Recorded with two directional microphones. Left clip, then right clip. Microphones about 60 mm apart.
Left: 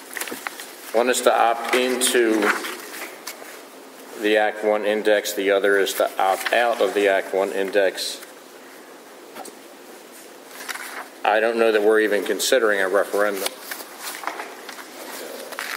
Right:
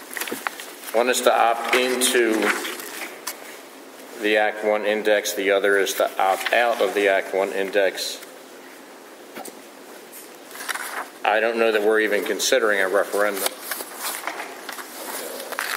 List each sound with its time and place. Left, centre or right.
0.3 s walk: right
0.9 s speech: centre
2.4 s a sound: left
4.2 s speech: centre
7.1 s speech: centre
10.6 s insect: right
11.2 s speech: centre
13.3 s a sound: right
14.2 s walk: centre
14.7 s a sound: right